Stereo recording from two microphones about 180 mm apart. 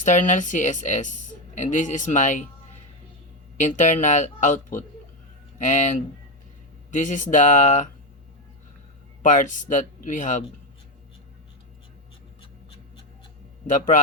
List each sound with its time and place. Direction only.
0.0 s speech: 40° left (ahead or behind)
3.6 s speech: 40° left (ahead or behind)
9.2 s speech: 45° left (ahead or behind)
13.7 s speech: 45° left (ahead or behind)